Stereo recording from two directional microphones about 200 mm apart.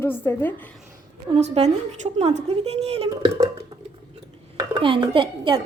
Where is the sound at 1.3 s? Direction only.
35° right (ahead or behind).